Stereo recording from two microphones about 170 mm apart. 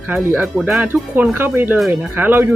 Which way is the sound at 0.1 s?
15° right (ahead or behind).